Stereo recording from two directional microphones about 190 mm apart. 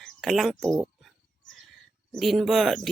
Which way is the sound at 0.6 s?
15° right (ahead or behind).